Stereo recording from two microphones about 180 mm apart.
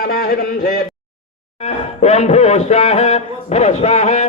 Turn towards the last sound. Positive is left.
turn(degrees=40)  # may be behind; listen again after turning